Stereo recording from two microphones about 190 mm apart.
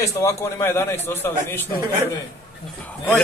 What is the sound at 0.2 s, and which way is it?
A man's voice, 15° left (ahead or behind).